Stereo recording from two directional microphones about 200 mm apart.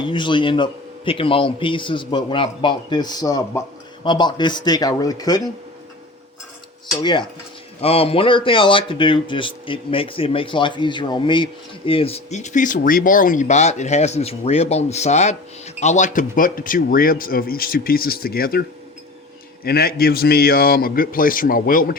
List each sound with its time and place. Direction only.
0.0 s speech: 25° left (ahead or behind)
7.0 s speech: 25° left (ahead or behind); by 18.6 s 50° left (ahead or behind)
19.6 s a man's voice: 50° left (ahead or behind)